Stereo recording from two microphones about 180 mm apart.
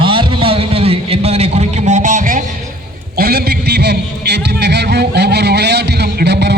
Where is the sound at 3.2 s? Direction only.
60° right (ahead or behind).